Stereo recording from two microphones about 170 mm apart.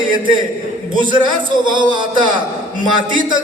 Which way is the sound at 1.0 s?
30° right (ahead or behind).